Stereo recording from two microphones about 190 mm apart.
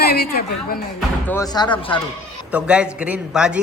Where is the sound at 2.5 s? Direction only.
5° right (ahead or behind).